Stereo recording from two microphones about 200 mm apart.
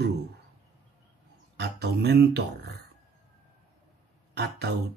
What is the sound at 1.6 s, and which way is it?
Speech, 55° right (ahead or behind).